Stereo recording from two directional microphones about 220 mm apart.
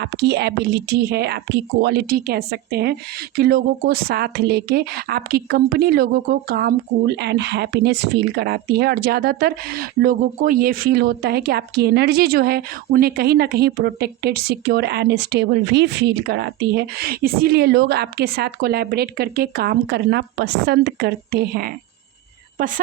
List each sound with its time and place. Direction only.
0.0 s speech: 50° right (ahead or behind)